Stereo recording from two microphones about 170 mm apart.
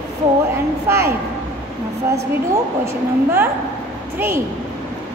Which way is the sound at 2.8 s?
15° right (ahead or behind).